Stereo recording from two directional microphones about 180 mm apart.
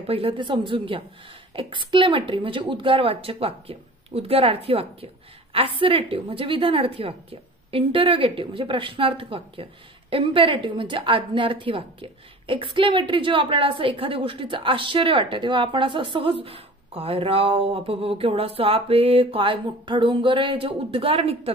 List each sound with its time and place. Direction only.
0.0 s a woman's voice: 30° right (ahead or behind)